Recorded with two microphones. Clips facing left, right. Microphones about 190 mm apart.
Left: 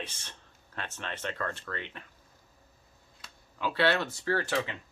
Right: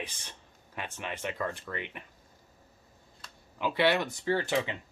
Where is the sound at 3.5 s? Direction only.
15° right (ahead or behind).